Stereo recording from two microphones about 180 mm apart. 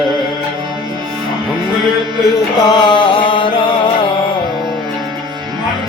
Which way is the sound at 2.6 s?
25° left (ahead or behind).